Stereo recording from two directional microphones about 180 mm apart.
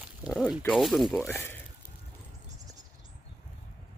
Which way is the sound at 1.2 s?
10° left (ahead or behind).